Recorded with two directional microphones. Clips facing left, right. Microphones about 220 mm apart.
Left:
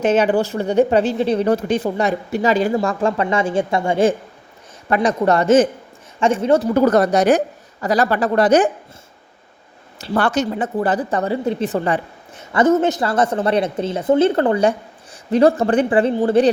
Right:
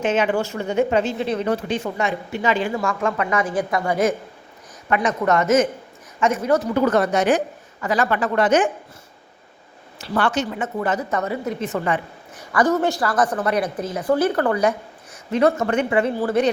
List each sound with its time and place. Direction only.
0.0 s a woman's voice: 40° left (ahead or behind)
6.7 s speech: 40° left (ahead or behind)
10.2 s a woman's voice: 40° left (ahead or behind)